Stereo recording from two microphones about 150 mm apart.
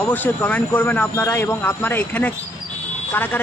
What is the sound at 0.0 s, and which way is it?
Speech, 10° left (ahead or behind).